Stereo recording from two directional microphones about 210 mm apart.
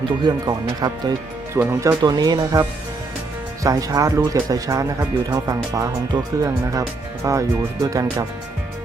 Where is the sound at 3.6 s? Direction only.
15° right (ahead or behind).